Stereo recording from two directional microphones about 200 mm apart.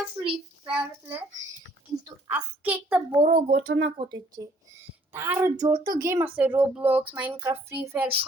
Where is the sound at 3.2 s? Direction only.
25° right (ahead or behind).